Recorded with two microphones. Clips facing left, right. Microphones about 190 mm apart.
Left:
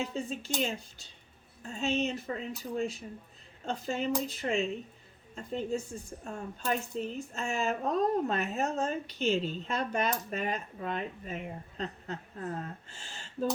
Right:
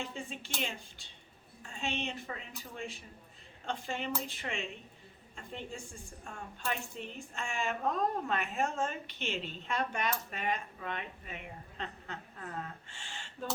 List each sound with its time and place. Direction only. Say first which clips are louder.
0.0 s speech: left 6 dB; 40° left (ahead or behind)